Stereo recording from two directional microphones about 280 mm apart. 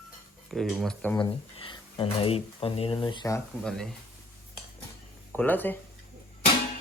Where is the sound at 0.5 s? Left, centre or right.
Centre.